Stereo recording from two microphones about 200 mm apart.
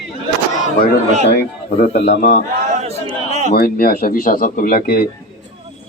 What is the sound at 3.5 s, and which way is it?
Speech, 50° left (ahead or behind).